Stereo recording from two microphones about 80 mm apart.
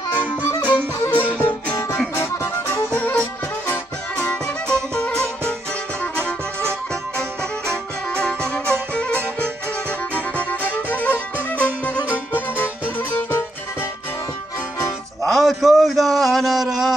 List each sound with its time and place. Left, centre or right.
0.1 s music: right
1.1 s music: left
2.7 s music: centre
4.9 s music: centre
7.7 s music: centre
8.4 s music: right
10.9 s music: left
15.2 s a sound: centre